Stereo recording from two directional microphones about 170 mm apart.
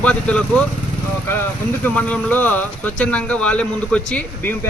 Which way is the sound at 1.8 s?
10° left (ahead or behind).